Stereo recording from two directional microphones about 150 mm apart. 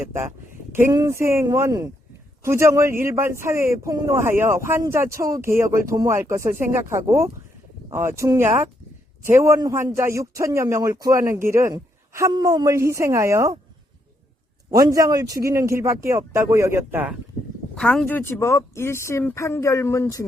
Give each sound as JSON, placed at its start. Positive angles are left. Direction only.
{"t": 0.0, "sound": "a sound", "side_deg": -15}
{"t": 0.7, "sound": "a man's voice", "side_deg": -20}
{"t": 14.7, "sound": "a man's voice", "side_deg": -20}
{"t": 17.7, "sound": "speech", "side_deg": 5}
{"t": 18.2, "sound": "speech", "side_deg": 15}